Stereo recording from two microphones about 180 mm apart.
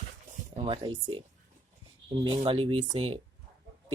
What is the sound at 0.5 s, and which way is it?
Speech, 35° right (ahead or behind).